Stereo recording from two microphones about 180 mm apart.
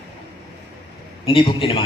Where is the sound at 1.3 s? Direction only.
30° left (ahead or behind).